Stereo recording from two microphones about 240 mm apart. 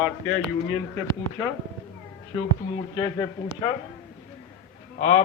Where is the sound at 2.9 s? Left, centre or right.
Centre.